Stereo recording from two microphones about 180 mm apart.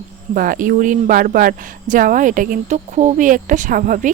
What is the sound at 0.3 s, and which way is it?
Speech, 50° right (ahead or behind).